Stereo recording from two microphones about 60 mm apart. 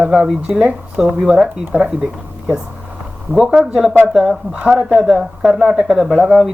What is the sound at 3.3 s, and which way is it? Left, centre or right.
Speech, centre.